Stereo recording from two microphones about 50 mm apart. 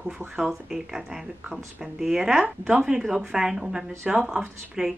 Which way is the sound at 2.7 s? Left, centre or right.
Centre.